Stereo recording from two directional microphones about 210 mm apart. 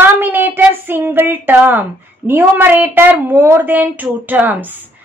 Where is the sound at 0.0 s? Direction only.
10° right (ahead or behind).